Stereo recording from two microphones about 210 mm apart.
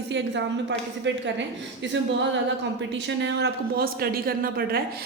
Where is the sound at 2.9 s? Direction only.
60° right (ahead or behind).